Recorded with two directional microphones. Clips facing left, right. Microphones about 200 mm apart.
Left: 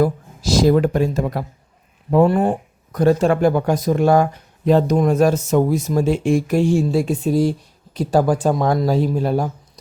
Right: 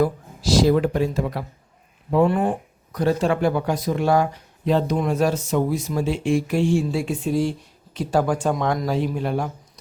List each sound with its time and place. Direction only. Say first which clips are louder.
0.0 s speech: left 3 dB; 45° left (ahead or behind)